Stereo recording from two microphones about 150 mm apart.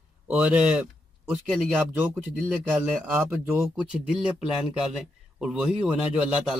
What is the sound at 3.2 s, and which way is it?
Speech, 15° right (ahead or behind).